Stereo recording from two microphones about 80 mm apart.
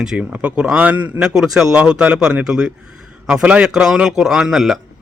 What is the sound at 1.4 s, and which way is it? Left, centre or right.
A man's voice, centre.